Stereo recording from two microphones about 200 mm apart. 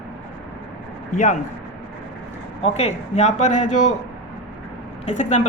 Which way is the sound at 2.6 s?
35° left (ahead or behind).